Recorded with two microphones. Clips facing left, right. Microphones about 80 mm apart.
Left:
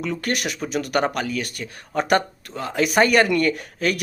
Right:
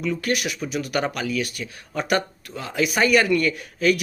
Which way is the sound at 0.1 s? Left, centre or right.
Left.